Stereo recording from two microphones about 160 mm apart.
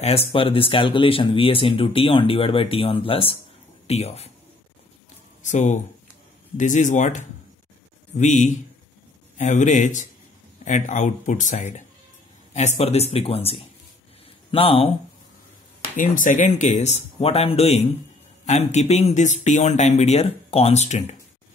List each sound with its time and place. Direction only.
0.0 s speech: 40° left (ahead or behind)
5.4 s speech: 50° left (ahead or behind)
16.0 s speech: 55° left (ahead or behind)